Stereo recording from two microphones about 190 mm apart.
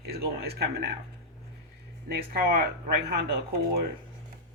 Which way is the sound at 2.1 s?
55° right (ahead or behind).